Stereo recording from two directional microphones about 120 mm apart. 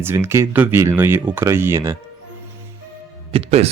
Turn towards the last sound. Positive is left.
turn(degrees=-60)  # may be behind; listen again after turning